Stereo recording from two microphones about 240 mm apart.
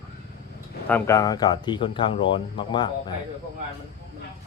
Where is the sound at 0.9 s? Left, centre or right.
Centre.